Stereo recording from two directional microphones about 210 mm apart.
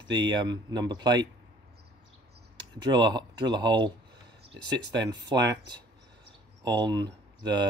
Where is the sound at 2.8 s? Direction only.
20° right (ahead or behind).